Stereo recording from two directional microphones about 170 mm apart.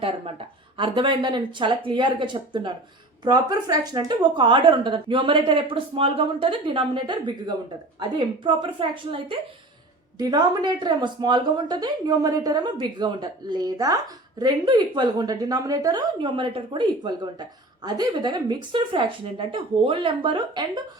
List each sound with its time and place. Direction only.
0.0 s a woman's voice: 30° right (ahead or behind)